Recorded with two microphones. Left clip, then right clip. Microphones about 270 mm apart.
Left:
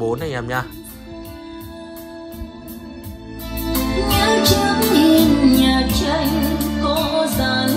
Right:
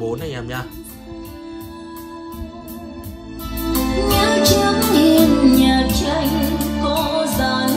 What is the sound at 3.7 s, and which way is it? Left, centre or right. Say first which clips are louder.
Music: right 1 dB; centre.